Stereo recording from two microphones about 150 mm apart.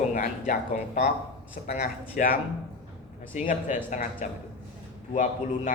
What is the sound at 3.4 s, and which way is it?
Speech, 60° left (ahead or behind).